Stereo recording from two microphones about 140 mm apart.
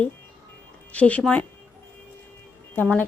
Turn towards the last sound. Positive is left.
turn(degrees=10)  # may be behind; listen again after turning